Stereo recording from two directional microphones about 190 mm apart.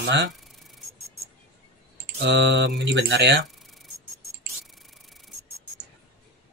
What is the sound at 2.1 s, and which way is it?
Speech, 65° right (ahead or behind).